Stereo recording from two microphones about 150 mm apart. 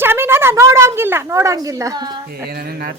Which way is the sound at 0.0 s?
15° right (ahead or behind).